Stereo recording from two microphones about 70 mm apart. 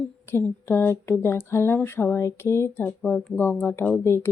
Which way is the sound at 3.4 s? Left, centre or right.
Left.